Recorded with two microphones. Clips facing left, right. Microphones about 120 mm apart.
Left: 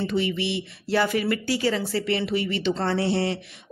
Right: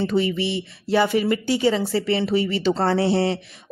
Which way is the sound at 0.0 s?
40° right (ahead or behind).